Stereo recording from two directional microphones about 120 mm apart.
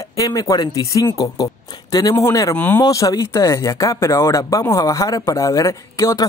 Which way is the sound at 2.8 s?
25° left (ahead or behind).